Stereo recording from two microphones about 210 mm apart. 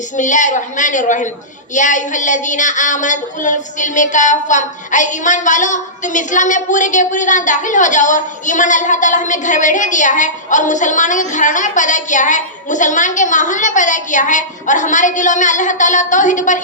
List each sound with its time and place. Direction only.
0.2 s a woman's voice: 35° left (ahead or behind)